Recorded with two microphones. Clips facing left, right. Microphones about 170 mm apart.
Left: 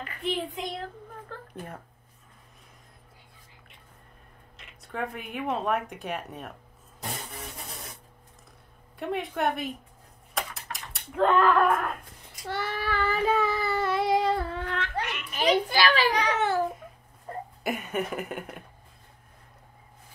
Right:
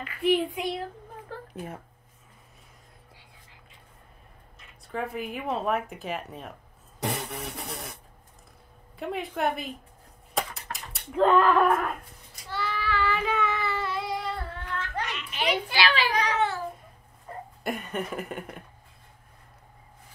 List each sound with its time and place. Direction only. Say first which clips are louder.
0.2 s a child's voice: right 7 dB; 10° right (ahead or behind)
4.9 s speech: right 1 dB; centre (ahead or behind)
7.0 s vehicle: right 6 dB; 80° right
8.9 s speech: left 1 dB; centre (ahead or behind)
10.3 s typewriter: right 3 dB; centre (ahead or behind)
12.4 s child singing: left 1 dB; 55° left (ahead or behind)
14.0 s child singing: left 8 dB; 90° left
15.0 s a sound: left 5 dB; 45° left (ahead or behind)
17.6 s speech: left 1 dB; 5° left (ahead or behind)